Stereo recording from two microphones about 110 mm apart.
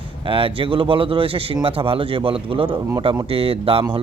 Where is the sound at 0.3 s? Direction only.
55° right (ahead or behind).